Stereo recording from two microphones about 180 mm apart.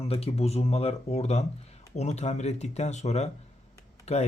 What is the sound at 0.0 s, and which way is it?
Speech, 35° left (ahead or behind).